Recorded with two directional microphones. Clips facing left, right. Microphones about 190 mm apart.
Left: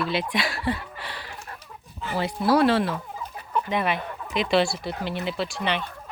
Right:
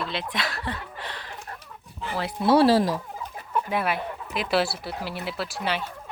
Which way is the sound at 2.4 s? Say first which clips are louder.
Right 2 dB; 30° right (ahead or behind).